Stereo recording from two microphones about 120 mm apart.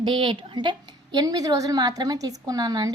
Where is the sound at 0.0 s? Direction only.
45° right (ahead or behind).